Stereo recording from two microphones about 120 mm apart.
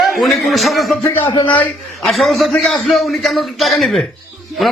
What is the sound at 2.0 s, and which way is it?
A man's voice, centre (ahead or behind).